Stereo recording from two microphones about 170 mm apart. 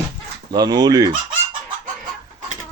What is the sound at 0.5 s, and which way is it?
Speech, 25° right (ahead or behind).